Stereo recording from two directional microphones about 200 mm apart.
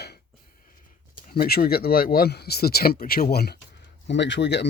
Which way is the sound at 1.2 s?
45° left (ahead or behind).